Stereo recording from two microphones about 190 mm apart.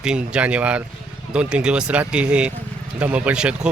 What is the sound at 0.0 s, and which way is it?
Speech, 5° right (ahead or behind).